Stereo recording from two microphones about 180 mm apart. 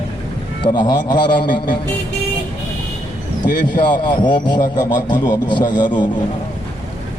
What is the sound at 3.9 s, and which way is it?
A man's voice, 25° left (ahead or behind).